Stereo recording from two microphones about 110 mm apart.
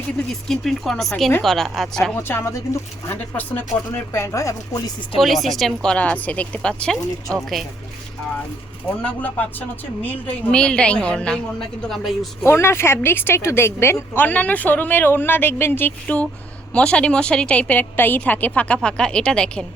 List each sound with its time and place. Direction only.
0.4 s speech: centre (ahead or behind)
2.1 s a woman's voice: 20° left (ahead or behind)
5.2 s a woman's voice: centre (ahead or behind)
9.0 s a woman's voice: 10° left (ahead or behind)
12.4 s a woman's voice: 20° left (ahead or behind)